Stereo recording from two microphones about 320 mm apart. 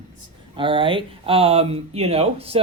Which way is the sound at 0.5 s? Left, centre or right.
Centre.